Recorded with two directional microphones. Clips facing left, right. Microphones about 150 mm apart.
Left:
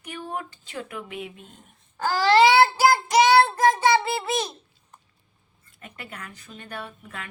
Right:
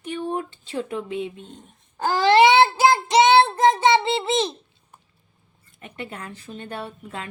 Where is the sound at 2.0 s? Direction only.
20° right (ahead or behind).